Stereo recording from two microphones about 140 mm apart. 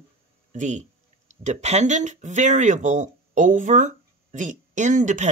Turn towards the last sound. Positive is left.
turn(degrees=-60)  # may be behind; listen again after turning